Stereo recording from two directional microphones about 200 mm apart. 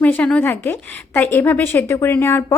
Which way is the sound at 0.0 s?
5° left (ahead or behind).